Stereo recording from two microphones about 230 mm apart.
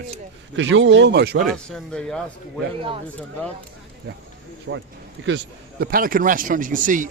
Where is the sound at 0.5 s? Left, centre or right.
Right.